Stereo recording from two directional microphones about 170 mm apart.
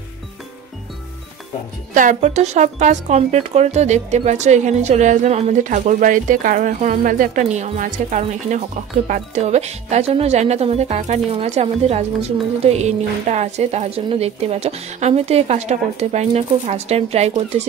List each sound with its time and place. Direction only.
2.0 s speech: 45° right (ahead or behind)